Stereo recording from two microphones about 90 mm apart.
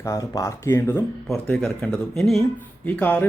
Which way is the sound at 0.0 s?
35° left (ahead or behind).